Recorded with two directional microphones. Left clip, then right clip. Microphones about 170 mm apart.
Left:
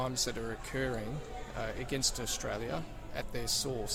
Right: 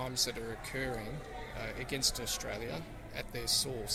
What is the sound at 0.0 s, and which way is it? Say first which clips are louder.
A man's voice: left 1 dB; 45° left (ahead or behind).